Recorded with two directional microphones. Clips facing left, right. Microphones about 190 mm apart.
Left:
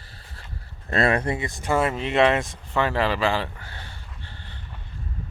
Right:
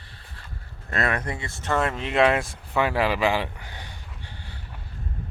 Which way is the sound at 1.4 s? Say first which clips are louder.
Left 2 dB; 15° left (ahead or behind).